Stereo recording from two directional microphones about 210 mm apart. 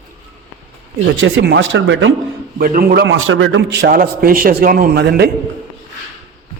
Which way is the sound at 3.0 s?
65° right (ahead or behind).